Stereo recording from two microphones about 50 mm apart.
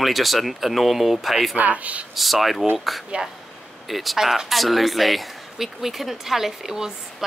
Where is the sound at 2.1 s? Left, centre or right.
Centre.